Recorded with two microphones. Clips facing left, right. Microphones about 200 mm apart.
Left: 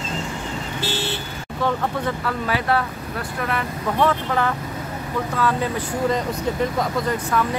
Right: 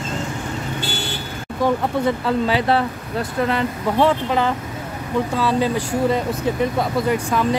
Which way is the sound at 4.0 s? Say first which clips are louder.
Right 3 dB; 15° right (ahead or behind).